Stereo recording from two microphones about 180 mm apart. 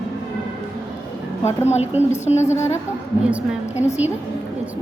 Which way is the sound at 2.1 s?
40° left (ahead or behind).